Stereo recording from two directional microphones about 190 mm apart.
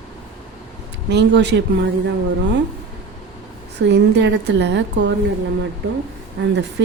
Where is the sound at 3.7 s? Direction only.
65° right (ahead or behind).